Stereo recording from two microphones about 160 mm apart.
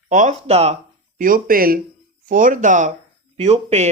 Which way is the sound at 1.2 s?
60° right (ahead or behind).